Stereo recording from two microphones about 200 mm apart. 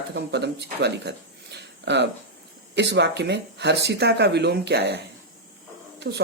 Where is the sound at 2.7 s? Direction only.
60° right (ahead or behind).